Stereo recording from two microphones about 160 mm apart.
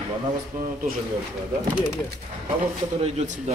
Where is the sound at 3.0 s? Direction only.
40° right (ahead or behind).